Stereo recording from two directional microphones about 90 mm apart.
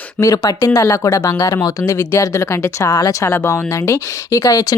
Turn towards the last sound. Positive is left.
turn(degrees=40)  # may be behind; listen again after turning